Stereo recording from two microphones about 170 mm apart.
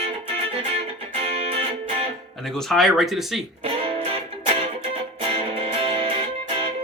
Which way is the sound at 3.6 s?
35° right (ahead or behind).